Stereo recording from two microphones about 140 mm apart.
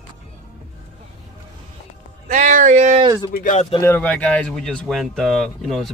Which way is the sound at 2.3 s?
60° right (ahead or behind).